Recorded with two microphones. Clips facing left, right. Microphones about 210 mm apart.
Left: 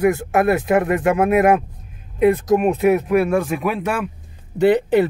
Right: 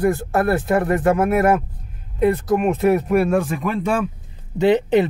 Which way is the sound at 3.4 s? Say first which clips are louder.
Left 1 dB; 10° left (ahead or behind).